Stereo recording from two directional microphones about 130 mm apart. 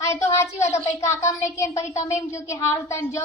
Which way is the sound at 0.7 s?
60° left (ahead or behind).